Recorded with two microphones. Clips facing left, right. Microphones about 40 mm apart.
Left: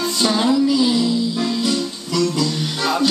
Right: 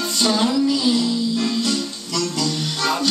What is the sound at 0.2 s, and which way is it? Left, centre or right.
Music, centre.